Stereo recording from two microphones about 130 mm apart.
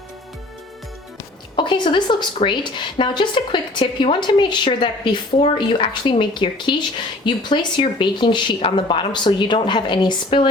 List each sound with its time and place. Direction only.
1.5 s speech: 40° left (ahead or behind)